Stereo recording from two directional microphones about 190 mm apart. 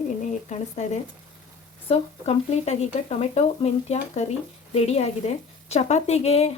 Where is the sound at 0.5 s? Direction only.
35° left (ahead or behind).